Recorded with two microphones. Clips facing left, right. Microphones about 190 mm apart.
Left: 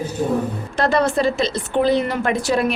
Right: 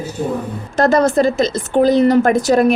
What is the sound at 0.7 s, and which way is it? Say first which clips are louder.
A woman's voice: right 5 dB; 45° right (ahead or behind).